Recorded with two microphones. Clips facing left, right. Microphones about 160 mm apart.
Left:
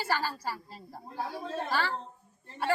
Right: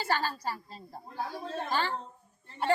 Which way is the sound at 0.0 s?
10° left (ahead or behind).